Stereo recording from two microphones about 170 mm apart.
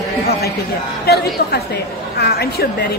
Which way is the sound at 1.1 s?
70° left (ahead or behind).